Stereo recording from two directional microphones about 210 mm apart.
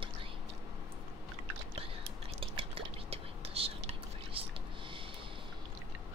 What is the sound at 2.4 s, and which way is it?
Whispering, 25° right (ahead or behind).